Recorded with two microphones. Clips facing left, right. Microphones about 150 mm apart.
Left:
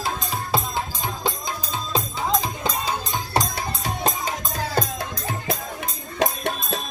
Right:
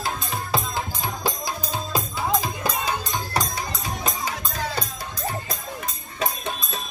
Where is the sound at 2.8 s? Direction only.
25° left (ahead or behind).